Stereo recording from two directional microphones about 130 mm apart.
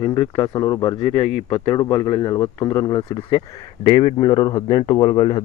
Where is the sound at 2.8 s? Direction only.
30° left (ahead or behind).